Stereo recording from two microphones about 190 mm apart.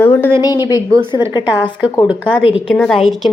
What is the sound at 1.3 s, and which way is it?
Speech, 20° left (ahead or behind).